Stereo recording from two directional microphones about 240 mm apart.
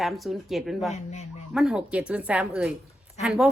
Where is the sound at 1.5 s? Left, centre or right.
Centre.